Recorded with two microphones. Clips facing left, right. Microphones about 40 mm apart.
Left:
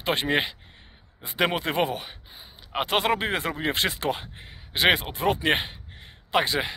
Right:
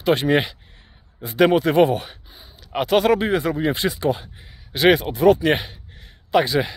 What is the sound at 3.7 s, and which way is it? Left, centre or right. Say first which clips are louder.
Speech: right 4 dB; left.